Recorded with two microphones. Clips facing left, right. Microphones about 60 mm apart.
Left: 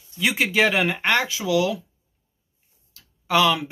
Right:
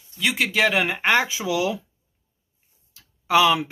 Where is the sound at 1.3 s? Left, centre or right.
Centre.